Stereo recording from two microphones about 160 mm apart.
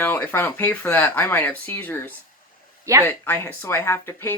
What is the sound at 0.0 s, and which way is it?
Speech, 10° left (ahead or behind).